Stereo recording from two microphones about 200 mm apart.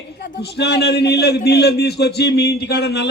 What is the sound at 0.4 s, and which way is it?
A man's voice, 55° left (ahead or behind).